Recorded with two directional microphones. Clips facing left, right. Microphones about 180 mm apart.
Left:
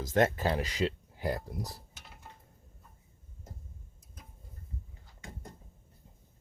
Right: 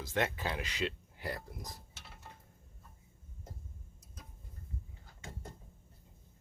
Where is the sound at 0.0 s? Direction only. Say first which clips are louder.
Left 7 dB; 45° left (ahead or behind).